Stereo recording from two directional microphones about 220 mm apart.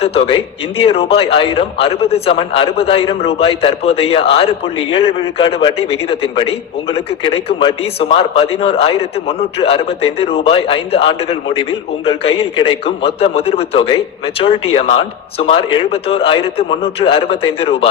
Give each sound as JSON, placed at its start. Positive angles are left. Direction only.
{"t": 0.0, "sound": "a man's voice", "side_deg": 25}